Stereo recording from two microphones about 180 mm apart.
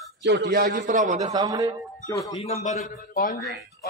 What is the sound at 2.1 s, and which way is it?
Speech, 20° left (ahead or behind).